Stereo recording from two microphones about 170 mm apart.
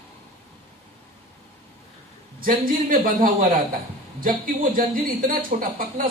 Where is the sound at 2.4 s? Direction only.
55° right (ahead or behind).